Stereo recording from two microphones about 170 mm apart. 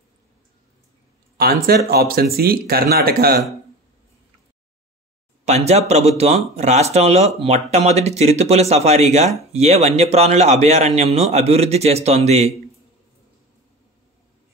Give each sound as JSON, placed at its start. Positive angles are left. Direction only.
{"t": 1.4, "sound": "speech", "side_deg": -65}
{"t": 5.4, "sound": "speech", "side_deg": -40}